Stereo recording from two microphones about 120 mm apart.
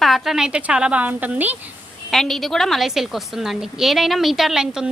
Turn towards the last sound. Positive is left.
turn(degrees=-5)  # may be behind; listen again after turning